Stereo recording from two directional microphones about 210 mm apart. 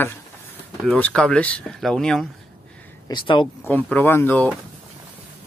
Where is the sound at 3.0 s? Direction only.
20° left (ahead or behind).